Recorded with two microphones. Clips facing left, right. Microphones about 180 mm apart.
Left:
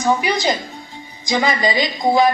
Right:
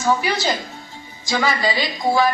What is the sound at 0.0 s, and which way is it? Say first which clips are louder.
A woman's voice: left 2 dB; 15° left (ahead or behind).